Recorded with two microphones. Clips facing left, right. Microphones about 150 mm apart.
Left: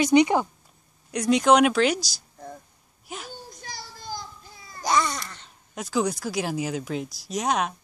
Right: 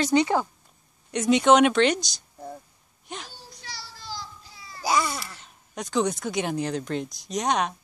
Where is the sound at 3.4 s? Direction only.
50° left (ahead or behind).